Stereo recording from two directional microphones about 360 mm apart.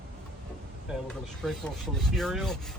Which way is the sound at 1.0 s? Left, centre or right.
Centre.